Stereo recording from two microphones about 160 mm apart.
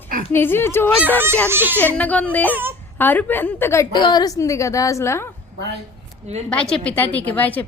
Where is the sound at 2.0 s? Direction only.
10° left (ahead or behind).